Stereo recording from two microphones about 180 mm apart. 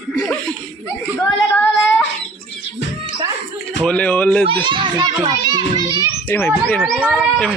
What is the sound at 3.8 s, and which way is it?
Speech, 5° left (ahead or behind).